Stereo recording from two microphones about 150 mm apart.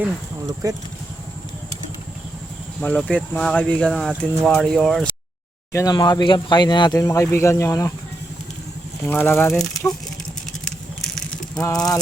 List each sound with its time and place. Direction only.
0.4 s speech: 25° right (ahead or behind)
2.8 s speech: 10° left (ahead or behind)
5.7 s speech: 25° left (ahead or behind)
9.0 s speech: 15° left (ahead or behind)
10.7 s vehicle: 5° left (ahead or behind)